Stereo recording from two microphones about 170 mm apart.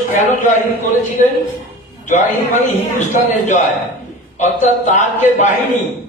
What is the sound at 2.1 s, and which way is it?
A man's voice, 45° left (ahead or behind).